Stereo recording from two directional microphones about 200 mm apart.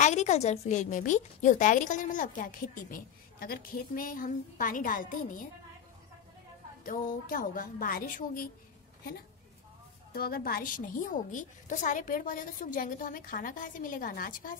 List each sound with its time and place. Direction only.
0.0 s a woman's voice: 35° left (ahead or behind)
6.8 s a woman's voice: 45° left (ahead or behind)
10.1 s a woman's voice: 50° left (ahead or behind)